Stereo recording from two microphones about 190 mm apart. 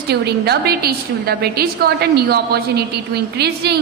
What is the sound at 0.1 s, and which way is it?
A woman's voice, 60° right (ahead or behind).